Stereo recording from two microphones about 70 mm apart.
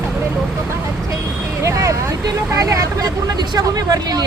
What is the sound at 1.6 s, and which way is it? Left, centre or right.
Speech, right.